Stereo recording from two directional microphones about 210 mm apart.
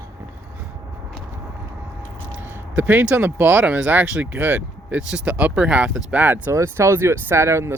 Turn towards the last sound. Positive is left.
turn(degrees=-15)  # may be behind; listen again after turning